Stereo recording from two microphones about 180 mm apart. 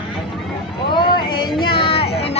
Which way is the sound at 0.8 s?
25° left (ahead or behind).